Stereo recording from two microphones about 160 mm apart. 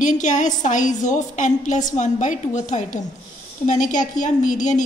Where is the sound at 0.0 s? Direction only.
50° left (ahead or behind).